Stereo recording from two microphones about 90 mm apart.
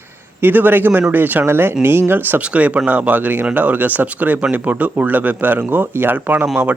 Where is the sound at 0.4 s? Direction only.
20° right (ahead or behind).